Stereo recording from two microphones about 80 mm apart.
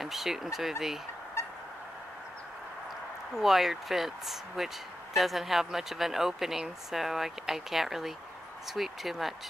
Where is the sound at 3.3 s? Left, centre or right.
Centre.